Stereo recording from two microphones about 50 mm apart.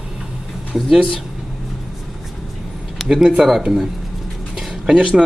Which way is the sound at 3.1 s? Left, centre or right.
Centre.